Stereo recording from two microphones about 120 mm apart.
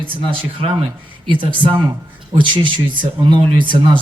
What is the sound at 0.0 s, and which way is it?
Speech, 45° right (ahead or behind).